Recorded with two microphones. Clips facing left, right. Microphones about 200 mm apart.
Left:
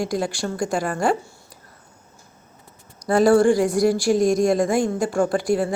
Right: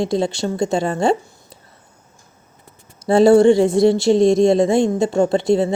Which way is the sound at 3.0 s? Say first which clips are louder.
Right 5 dB; 25° right (ahead or behind).